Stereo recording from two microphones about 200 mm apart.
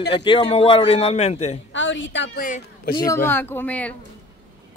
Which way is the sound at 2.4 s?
40° left (ahead or behind).